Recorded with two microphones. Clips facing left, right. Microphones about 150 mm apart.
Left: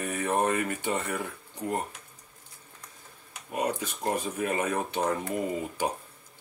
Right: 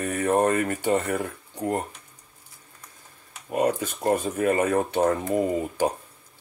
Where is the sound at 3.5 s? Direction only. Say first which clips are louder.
Right 6 dB; 50° right (ahead or behind).